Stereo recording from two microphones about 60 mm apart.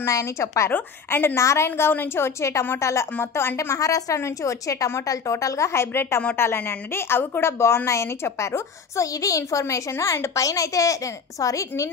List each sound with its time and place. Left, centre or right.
0.0 s a woman's voice: left
0.7 s a woman's voice: left
1.3 s a woman's voice: left
3.2 s a woman's voice: left
3.5 s a woman's voice: left